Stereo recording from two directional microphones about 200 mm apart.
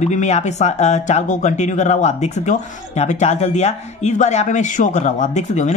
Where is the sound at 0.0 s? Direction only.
35° left (ahead or behind).